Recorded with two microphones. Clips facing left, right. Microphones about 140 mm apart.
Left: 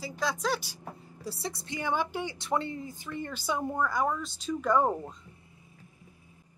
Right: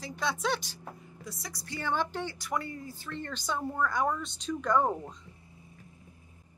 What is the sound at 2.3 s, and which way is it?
Speech, 25° left (ahead or behind).